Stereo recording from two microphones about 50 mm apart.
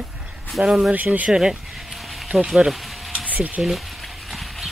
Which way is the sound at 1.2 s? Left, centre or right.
Centre.